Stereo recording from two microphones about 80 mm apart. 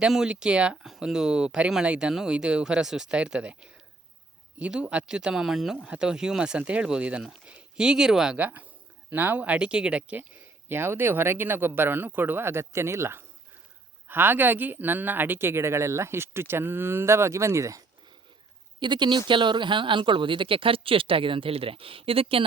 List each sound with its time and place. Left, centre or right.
0.0 s speech: centre
8.4 s speech: centre; by 17.8 s right
18.8 s speech: right
19.3 s speech: right